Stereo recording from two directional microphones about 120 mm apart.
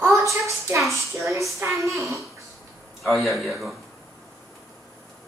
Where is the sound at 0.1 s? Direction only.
25° right (ahead or behind).